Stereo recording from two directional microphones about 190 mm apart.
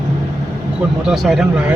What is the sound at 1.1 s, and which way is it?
Speech, centre (ahead or behind).